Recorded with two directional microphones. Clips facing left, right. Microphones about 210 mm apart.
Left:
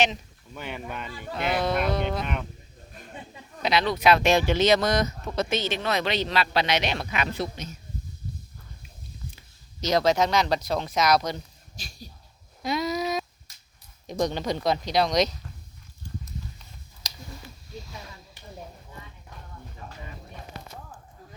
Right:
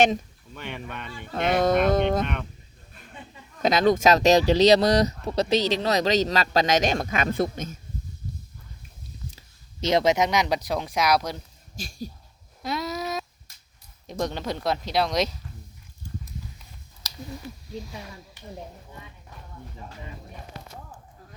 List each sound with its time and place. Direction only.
0.5 s speech: centre (ahead or behind)
1.3 s speech: 45° right (ahead or behind)
3.6 s speech: 45° right (ahead or behind)
9.8 s speech: 20° right (ahead or behind); by 11.4 s 5° right (ahead or behind)
12.6 s a sound: centre (ahead or behind)
14.1 s speech: centre (ahead or behind)